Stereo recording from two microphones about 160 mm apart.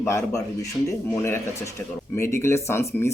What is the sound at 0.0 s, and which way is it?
Speech, 15° left (ahead or behind).